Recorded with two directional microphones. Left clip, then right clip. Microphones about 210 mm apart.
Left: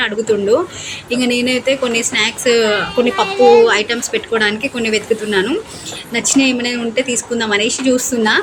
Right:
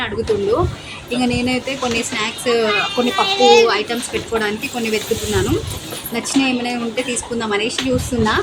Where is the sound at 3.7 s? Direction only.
10° left (ahead or behind).